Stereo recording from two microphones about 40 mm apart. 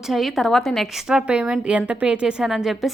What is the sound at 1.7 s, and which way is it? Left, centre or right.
Speech, right.